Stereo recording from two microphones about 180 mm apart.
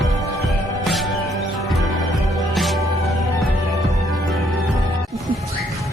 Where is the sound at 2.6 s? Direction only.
Centre (ahead or behind).